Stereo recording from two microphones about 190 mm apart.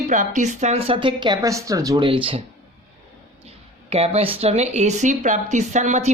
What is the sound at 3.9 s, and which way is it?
Speech, 30° right (ahead or behind).